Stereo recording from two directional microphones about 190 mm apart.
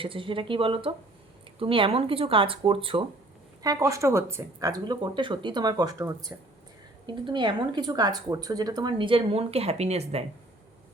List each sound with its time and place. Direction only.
0.0 s speech: 25° right (ahead or behind)
3.6 s speech: 20° right (ahead or behind); by 10.2 s 35° right (ahead or behind)